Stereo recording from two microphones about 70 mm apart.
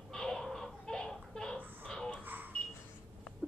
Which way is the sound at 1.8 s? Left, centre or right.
Centre.